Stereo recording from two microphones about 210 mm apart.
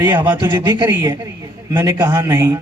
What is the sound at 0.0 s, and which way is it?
A man's voice, 10° right (ahead or behind).